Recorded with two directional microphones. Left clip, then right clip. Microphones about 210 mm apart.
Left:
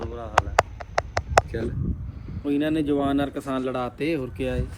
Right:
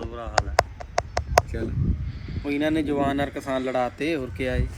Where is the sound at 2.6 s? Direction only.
10° right (ahead or behind).